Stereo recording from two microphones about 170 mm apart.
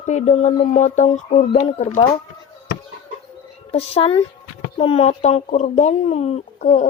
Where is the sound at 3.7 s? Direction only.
35° left (ahead or behind).